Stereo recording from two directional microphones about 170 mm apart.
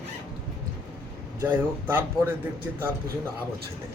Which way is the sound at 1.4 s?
10° right (ahead or behind).